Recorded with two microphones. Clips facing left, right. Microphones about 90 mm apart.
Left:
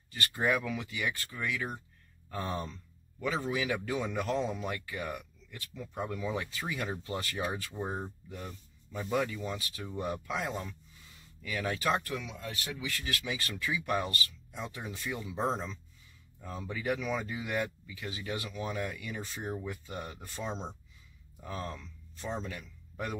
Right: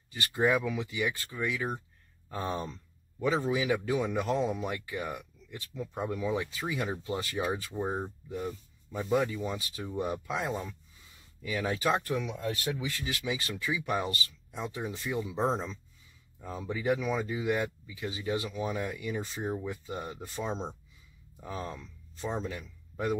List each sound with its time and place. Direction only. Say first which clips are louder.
0.1 s speech: right 3 dB; 15° right (ahead or behind)
12.1 s speech: right 6 dB; 35° right (ahead or behind)
12.9 s speech: right 2 dB; 15° right (ahead or behind)
15.4 s speech: even; centre (ahead or behind); by 18.5 s 20° right (ahead or behind)
18.5 s speech: right 3 dB; 10° right (ahead or behind)
20.4 s speech: right 2 dB; 10° right (ahead or behind)